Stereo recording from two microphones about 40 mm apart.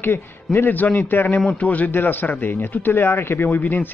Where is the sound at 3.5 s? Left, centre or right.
Left.